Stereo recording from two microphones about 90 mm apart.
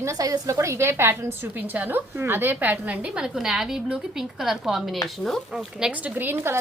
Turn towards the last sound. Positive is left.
turn(degrees=-20)  # may be behind; listen again after turning